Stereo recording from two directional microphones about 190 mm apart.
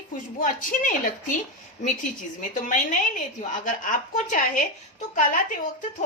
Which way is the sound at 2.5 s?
40° left (ahead or behind).